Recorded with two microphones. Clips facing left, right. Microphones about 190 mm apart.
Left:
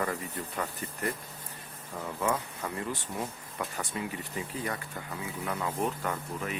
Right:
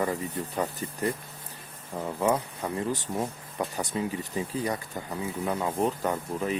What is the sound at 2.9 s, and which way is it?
Speech, 35° right (ahead or behind).